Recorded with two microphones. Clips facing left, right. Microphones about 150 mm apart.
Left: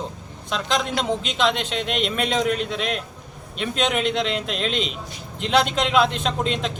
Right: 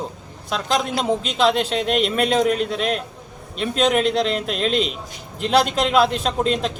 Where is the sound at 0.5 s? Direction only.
40° right (ahead or behind).